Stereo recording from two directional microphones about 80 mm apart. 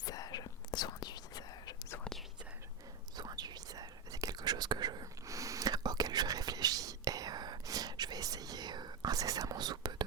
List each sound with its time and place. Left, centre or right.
0.0 s whispering: left
3.2 s whispering: right
5.2 s whispering: right